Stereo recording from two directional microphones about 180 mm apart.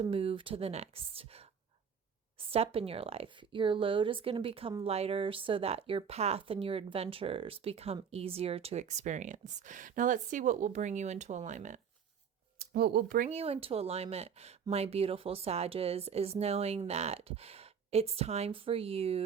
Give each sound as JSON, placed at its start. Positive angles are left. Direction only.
{"t": 0.0, "sound": "a woman's voice", "side_deg": -30}
{"t": 2.5, "sound": "a woman's voice", "side_deg": -35}
{"t": 12.5, "sound": "speech", "side_deg": -60}
{"t": 13.3, "sound": "a woman's voice", "side_deg": -35}